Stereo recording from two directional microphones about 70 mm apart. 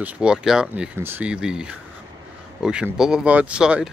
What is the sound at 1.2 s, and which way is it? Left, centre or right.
Speech, centre.